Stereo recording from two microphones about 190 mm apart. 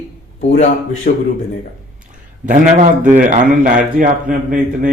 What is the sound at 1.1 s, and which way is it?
Speech, 45° left (ahead or behind).